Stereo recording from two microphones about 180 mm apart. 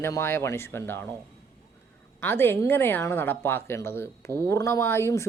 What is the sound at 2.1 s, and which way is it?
A woman's voice, 10° left (ahead or behind).